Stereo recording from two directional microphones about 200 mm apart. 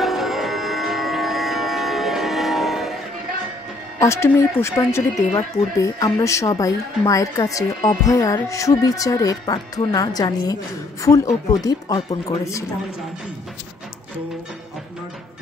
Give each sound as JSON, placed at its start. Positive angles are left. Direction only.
{"t": 0.0, "sound": "music", "side_deg": 0}
{"t": 4.0, "sound": "speech", "side_deg": 15}